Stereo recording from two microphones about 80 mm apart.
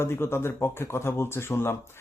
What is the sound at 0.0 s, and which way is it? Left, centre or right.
Speech, left.